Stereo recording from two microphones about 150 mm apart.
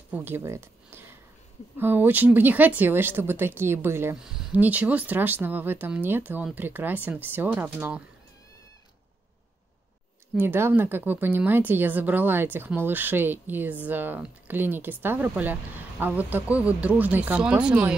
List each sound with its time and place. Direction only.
0.1 s a woman's voice: 15° right (ahead or behind)
4.2 s a woman's voice: 5° right (ahead or behind)
10.3 s a woman's voice: 15° right (ahead or behind)